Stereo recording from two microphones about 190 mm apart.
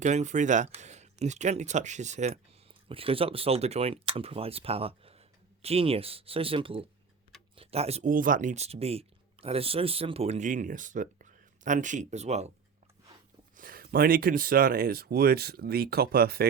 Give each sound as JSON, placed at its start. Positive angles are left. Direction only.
{"t": 0.0, "sound": "speech", "side_deg": -40}
{"t": 13.6, "sound": "speech", "side_deg": -50}